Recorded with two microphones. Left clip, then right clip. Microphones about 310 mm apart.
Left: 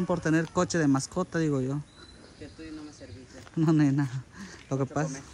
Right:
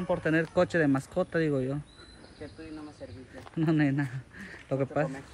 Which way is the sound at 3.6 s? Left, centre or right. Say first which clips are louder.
Left 2 dB; centre.